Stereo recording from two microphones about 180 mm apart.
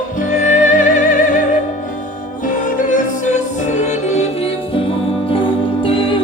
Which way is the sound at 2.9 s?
45° left (ahead or behind).